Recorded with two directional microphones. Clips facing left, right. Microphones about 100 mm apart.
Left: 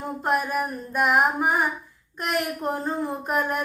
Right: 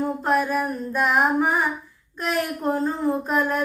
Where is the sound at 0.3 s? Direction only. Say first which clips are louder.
Right 1 dB; 15° left (ahead or behind).